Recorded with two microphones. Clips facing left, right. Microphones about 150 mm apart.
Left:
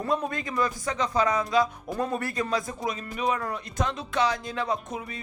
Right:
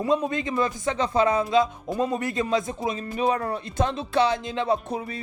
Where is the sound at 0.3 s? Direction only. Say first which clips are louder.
Right 3 dB; 25° right (ahead or behind).